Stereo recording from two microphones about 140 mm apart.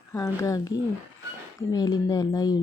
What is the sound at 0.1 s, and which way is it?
Speech, 25° left (ahead or behind).